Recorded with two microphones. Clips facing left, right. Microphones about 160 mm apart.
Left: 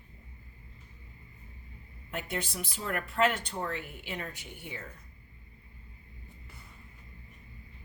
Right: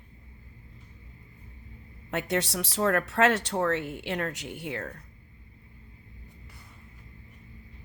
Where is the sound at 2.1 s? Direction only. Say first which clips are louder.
Right 7 dB; 80° right.